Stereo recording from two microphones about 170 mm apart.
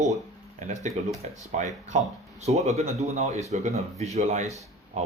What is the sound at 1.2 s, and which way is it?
Speech, 45° right (ahead or behind).